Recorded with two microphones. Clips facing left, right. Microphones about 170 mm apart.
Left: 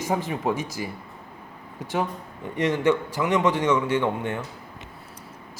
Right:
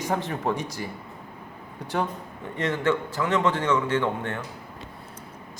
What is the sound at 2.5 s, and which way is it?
A man's voice, 15° left (ahead or behind).